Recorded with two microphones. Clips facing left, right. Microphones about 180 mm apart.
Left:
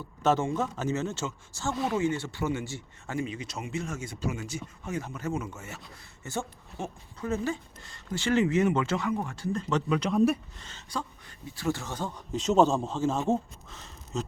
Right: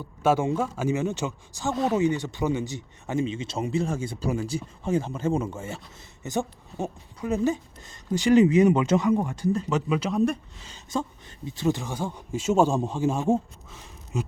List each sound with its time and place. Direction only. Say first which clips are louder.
0.0 s a man's voice: right 3 dB; 10° right (ahead or behind)
10.7 s speech: right 6 dB; 20° right (ahead or behind)